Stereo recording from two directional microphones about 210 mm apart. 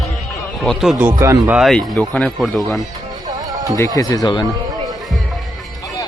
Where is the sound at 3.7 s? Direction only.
15° left (ahead or behind).